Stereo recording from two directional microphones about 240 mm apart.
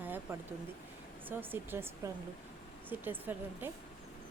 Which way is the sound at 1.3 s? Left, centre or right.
Centre.